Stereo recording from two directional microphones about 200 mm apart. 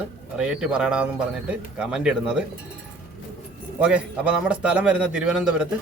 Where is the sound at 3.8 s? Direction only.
5° right (ahead or behind).